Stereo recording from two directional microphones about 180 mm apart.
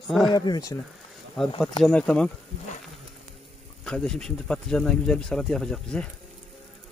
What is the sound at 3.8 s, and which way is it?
Speech, 5° left (ahead or behind).